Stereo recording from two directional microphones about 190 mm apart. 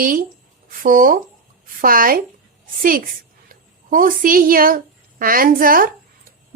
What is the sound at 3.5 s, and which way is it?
A woman's voice, 45° right (ahead or behind).